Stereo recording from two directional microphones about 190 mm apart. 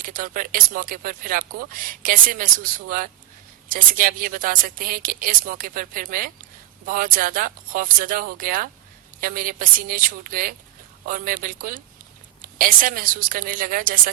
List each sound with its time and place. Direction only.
0.0 s speech: 45° right (ahead or behind)